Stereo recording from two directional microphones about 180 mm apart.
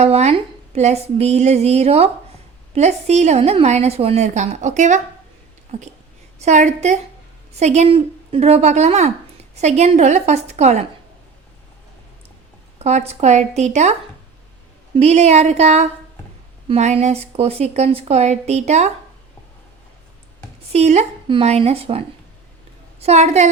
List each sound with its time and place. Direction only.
0.0 s a woman's voice: 35° right (ahead or behind)
12.8 s a woman's voice: 35° right (ahead or behind)
14.9 s a woman's voice: 35° right (ahead or behind)
20.7 s a woman's voice: 40° right (ahead or behind)